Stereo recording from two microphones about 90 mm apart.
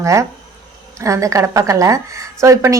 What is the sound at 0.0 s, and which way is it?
Speech, 35° right (ahead or behind).